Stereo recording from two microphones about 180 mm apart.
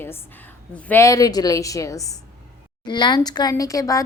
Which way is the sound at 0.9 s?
15° left (ahead or behind).